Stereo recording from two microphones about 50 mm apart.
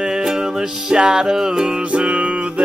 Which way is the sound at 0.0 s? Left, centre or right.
Centre.